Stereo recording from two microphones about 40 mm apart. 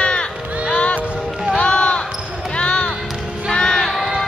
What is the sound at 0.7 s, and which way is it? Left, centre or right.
Music, left.